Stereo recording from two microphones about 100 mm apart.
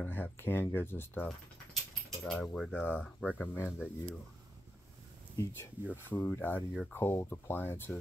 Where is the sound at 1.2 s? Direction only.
5° left (ahead or behind).